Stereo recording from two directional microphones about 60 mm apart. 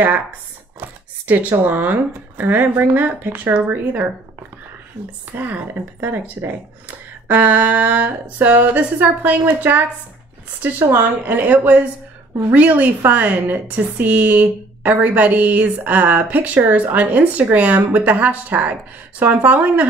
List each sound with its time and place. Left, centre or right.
0.7 s speech: right
5.3 s a woman's voice: right